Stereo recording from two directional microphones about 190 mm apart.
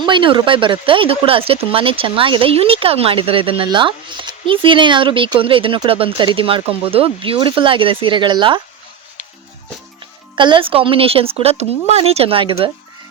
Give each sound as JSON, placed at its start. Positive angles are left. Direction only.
{"t": 0.0, "sound": "speech", "side_deg": -25}
{"t": 10.3, "sound": "speech", "side_deg": -25}